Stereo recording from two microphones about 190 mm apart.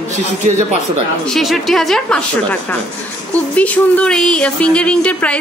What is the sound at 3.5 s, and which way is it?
A woman's voice, 5° left (ahead or behind).